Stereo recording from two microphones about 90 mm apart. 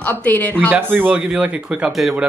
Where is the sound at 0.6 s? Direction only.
25° right (ahead or behind).